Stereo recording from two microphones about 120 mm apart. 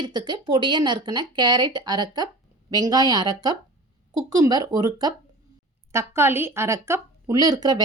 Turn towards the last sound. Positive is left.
turn(degrees=-35)  # may be behind; listen again after turning